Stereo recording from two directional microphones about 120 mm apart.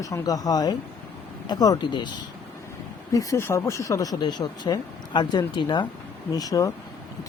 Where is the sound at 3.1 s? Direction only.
30° left (ahead or behind).